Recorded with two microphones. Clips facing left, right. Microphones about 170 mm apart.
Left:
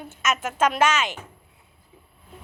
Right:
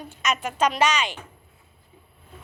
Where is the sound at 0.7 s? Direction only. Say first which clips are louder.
Left 1 dB; 50° left (ahead or behind).